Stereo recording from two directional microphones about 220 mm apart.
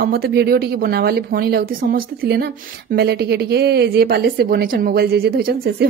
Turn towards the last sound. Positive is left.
turn(degrees=-45)  # may be behind; listen again after turning